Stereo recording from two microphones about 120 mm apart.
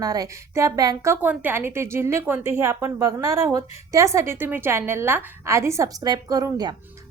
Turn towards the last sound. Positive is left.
turn(degrees=-30)  # may be behind; listen again after turning